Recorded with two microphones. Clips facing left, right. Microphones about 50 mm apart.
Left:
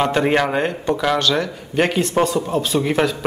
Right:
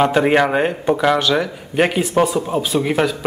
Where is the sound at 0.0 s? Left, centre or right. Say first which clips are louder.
Right 3 dB; centre.